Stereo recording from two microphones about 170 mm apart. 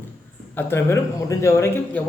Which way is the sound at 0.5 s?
15° left (ahead or behind).